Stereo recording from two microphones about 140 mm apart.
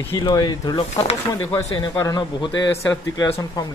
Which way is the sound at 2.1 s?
30° left (ahead or behind).